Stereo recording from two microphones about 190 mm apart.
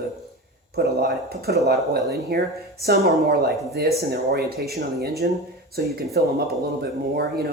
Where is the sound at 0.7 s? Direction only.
55° right (ahead or behind).